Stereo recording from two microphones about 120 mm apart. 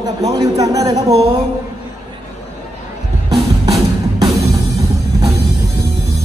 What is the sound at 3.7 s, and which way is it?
Music, 30° right (ahead or behind).